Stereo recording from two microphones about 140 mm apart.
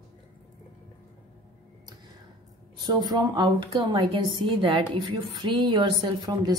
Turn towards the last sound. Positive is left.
turn(degrees=-30)  # may be behind; listen again after turning